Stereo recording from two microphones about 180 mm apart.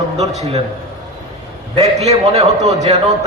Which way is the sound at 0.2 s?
35° right (ahead or behind).